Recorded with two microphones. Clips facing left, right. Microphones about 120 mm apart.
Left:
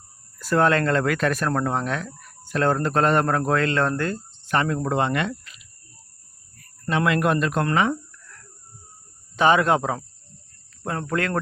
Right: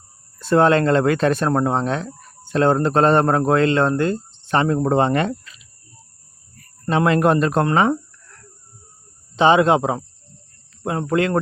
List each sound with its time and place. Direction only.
0.3 s speech: 25° right (ahead or behind)
6.8 s speech: 35° right (ahead or behind)